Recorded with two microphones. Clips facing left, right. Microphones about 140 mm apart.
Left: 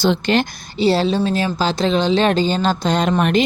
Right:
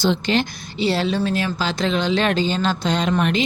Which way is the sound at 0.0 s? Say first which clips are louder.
Left 3 dB; 55° left (ahead or behind).